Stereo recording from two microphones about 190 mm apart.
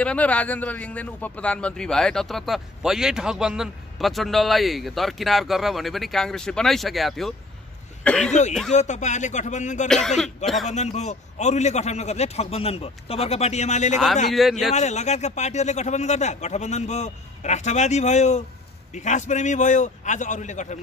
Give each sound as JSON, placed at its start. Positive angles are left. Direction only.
{"t": 0.0, "sound": "a man's voice", "side_deg": 5}
{"t": 8.7, "sound": "speech", "side_deg": 40}
{"t": 9.8, "sound": "a man's voice", "side_deg": 0}
{"t": 10.7, "sound": "speech", "side_deg": 35}
{"t": 14.3, "sound": "a man's voice", "side_deg": 0}
{"t": 14.7, "sound": "speech", "side_deg": 35}